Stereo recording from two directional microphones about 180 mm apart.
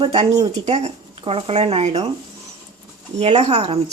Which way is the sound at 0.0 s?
35° right (ahead or behind).